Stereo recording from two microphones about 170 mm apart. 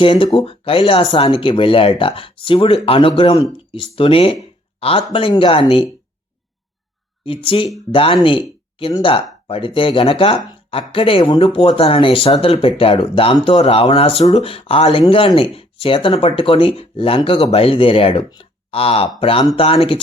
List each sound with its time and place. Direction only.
0.0 s speech: 30° left (ahead or behind)
7.3 s speech: 30° left (ahead or behind)